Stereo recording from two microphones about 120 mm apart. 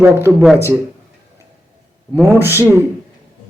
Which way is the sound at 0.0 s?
20° right (ahead or behind).